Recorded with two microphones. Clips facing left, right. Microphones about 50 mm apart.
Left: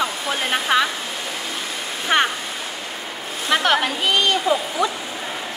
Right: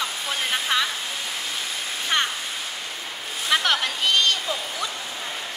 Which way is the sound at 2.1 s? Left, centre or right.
Left.